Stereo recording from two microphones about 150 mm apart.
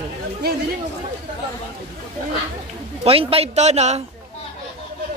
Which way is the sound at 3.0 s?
40° right (ahead or behind).